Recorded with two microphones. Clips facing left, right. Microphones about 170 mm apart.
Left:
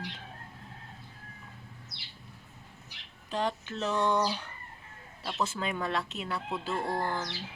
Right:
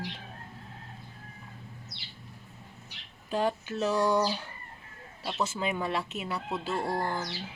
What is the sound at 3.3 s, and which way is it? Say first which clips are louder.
Speech: right 3 dB; 10° right (ahead or behind).